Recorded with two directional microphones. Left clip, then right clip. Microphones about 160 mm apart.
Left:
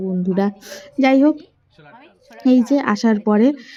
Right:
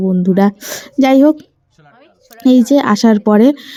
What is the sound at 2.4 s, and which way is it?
Speech, 35° right (ahead or behind).